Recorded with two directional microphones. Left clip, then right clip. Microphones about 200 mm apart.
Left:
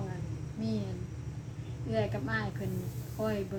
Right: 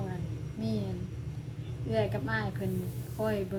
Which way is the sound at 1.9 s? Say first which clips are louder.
Right 2 dB; 15° right (ahead or behind).